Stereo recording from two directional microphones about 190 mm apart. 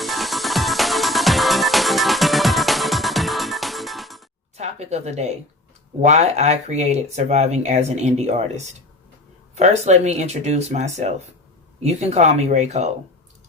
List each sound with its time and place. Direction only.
0.0 s music: centre (ahead or behind)
4.5 s a sound: 35° right (ahead or behind)
6.0 s speech: 35° right (ahead or behind)